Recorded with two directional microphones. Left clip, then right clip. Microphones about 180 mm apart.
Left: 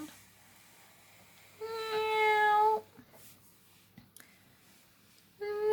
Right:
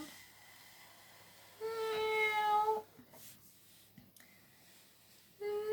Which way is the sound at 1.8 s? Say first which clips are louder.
Left 4 dB; 40° left (ahead or behind).